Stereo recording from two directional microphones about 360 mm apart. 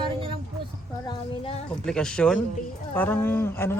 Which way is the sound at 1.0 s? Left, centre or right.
Centre.